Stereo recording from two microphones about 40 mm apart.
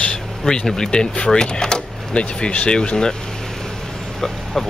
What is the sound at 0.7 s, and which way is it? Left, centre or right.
Speech, centre.